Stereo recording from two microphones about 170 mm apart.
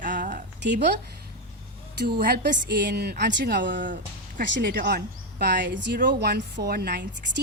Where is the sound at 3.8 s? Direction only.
50° right (ahead or behind).